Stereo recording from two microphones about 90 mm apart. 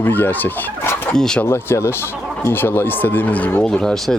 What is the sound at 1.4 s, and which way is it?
Speech, 30° left (ahead or behind).